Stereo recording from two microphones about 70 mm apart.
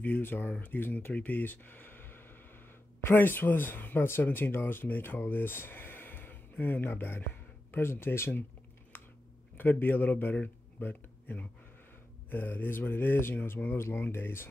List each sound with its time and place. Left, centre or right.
0.0 s speech: left
8.9 s a sound: left
9.6 s speech: left